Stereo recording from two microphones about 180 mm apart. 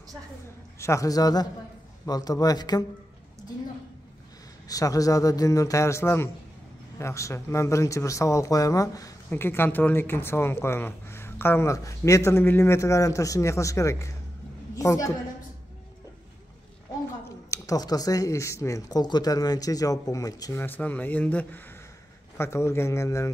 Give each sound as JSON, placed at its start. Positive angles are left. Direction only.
{"t": 0.7, "sound": "speech", "side_deg": 15}
{"t": 4.6, "sound": "a man's voice", "side_deg": 20}
{"t": 17.2, "sound": "a man's voice", "side_deg": 15}